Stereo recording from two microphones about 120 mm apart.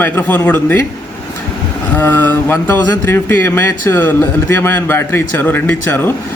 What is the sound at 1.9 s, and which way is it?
Speech, 15° left (ahead or behind).